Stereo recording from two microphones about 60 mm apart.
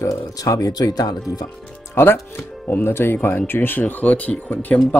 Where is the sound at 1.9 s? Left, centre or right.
Left.